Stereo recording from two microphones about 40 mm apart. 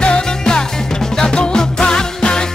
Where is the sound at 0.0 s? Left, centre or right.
Centre.